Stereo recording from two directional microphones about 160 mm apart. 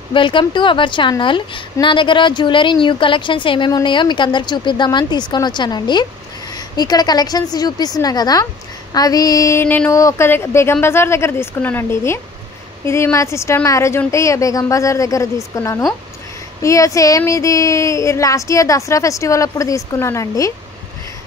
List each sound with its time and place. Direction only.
0.1 s a woman's voice: 30° left (ahead or behind)